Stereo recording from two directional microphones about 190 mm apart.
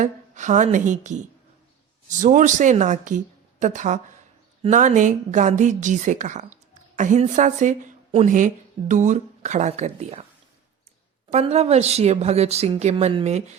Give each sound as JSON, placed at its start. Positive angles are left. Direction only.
{"t": 0.0, "sound": "a woman's voice", "side_deg": -40}
{"t": 11.3, "sound": "a woman's voice", "side_deg": -35}